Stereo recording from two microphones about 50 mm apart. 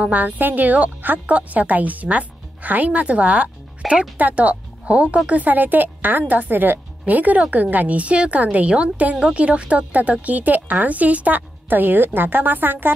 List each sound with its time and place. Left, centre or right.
0.0 s a woman's voice: right
3.8 s speech: centre
4.2 s a woman's voice: right